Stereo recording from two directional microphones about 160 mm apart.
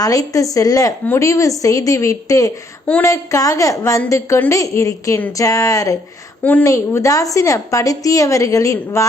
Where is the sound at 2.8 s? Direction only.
10° left (ahead or behind).